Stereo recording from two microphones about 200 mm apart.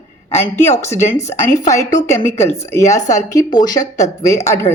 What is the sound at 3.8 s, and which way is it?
Speech, 35° left (ahead or behind).